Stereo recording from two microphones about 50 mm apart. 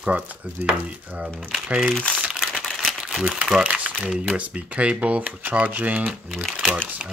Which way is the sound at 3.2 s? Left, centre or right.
Centre.